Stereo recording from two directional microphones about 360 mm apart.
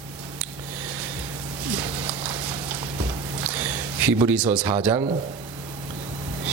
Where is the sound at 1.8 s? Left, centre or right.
Centre.